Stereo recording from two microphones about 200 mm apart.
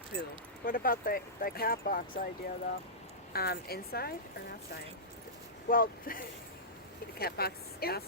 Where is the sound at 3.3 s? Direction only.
50° left (ahead or behind).